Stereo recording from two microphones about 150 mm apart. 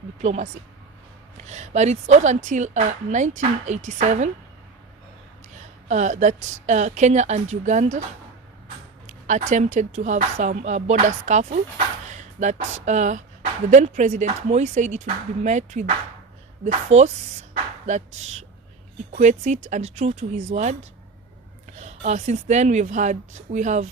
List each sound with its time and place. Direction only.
0.2 s speech: 50° right (ahead or behind)
5.9 s speech: 55° right (ahead or behind)
9.0 s speech: 55° right (ahead or behind)
21.8 s speech: 50° right (ahead or behind)